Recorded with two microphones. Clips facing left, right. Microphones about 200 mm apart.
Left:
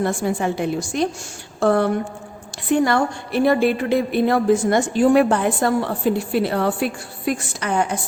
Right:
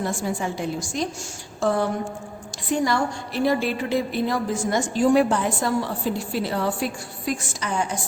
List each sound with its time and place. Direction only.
0.0 s a woman's voice: 60° left (ahead or behind)